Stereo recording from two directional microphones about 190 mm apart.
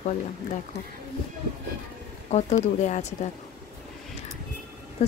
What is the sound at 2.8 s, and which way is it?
Speech, 35° left (ahead or behind).